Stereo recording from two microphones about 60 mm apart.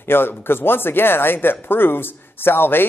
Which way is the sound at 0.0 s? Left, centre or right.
Left.